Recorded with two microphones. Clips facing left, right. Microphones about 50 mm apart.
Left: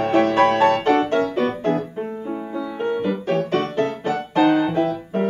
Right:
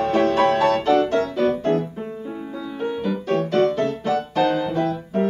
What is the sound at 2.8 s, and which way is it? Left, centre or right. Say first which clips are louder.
Music: left 1 dB; left.